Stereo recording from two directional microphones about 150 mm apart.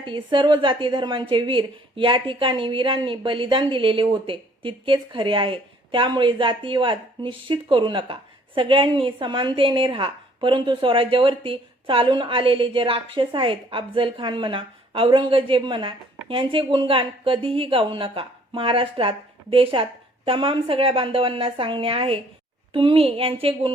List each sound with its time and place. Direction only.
0.0 s a woman's voice: 35° right (ahead or behind)